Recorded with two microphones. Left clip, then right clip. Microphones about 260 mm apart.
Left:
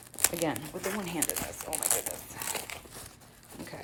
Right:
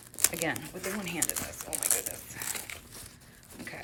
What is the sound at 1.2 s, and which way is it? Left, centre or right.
Crumpling, centre.